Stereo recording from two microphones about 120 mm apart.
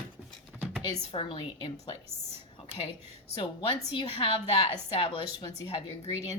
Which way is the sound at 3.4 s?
50° left (ahead or behind).